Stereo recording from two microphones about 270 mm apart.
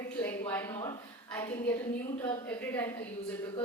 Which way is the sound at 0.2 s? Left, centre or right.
Centre.